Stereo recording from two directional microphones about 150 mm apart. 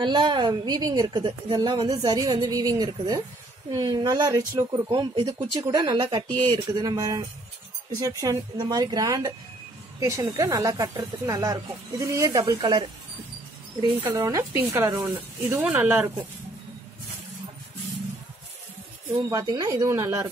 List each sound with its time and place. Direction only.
0.0 s a woman's voice: 30° right (ahead or behind); by 16.1 s 10° right (ahead or behind)
19.4 s a woman's voice: 25° right (ahead or behind)